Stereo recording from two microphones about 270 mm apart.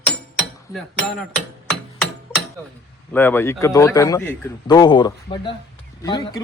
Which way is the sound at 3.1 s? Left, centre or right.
Centre.